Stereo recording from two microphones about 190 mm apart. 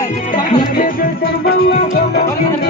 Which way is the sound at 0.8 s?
50° left (ahead or behind).